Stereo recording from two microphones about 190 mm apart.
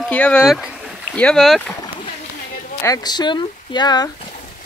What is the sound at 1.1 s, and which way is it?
Speech, 5° left (ahead or behind).